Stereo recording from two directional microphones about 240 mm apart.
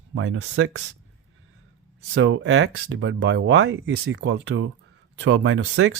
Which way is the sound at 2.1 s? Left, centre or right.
Right.